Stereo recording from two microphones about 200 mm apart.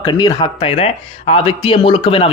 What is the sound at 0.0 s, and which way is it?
Speech, 20° left (ahead or behind).